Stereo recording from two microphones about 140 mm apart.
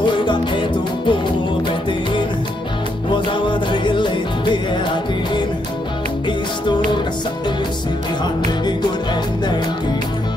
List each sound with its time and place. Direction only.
0.0 s music: 35° left (ahead or behind)
3.3 s music: 35° left (ahead or behind)